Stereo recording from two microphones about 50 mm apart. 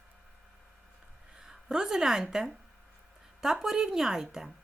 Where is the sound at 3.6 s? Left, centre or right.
Centre.